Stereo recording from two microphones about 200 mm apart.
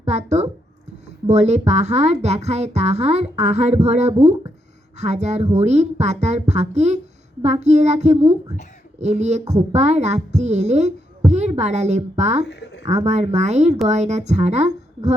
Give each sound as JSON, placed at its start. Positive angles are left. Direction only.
{"t": 0.0, "sound": "speech", "side_deg": -35}
{"t": 12.5, "sound": "a sound", "side_deg": 60}
{"t": 13.1, "sound": "speech", "side_deg": -35}